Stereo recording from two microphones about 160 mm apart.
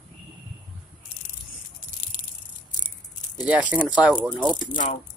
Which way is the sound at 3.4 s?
10° right (ahead or behind).